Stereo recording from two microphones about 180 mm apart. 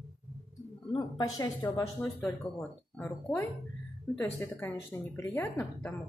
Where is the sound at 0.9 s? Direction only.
20° left (ahead or behind).